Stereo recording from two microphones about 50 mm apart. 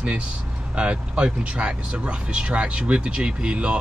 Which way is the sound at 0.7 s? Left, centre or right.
Right.